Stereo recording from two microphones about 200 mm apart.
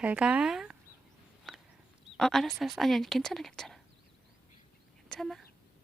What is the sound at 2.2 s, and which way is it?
Moo, centre (ahead or behind).